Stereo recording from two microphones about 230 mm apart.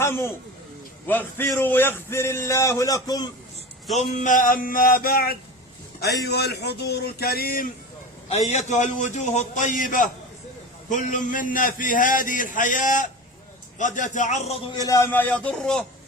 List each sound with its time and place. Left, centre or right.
0.0 s a man's voice: centre
3.9 s a man's voice: left
8.3 s a man's voice: left
14.8 s a man's voice: centre